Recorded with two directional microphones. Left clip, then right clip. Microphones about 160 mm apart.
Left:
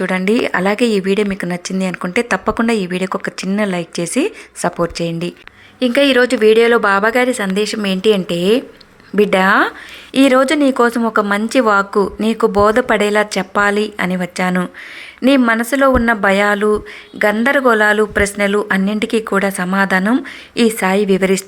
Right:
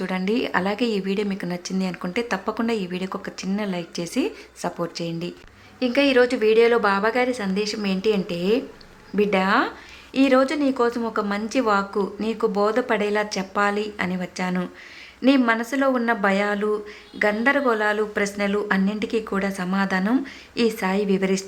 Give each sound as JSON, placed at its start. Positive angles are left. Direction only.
{"t": 0.0, "sound": "speech", "side_deg": 30}